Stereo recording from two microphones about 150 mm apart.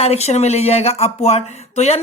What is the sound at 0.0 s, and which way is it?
Speech, 45° left (ahead or behind).